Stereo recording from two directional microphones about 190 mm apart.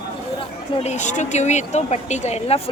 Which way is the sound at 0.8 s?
40° left (ahead or behind).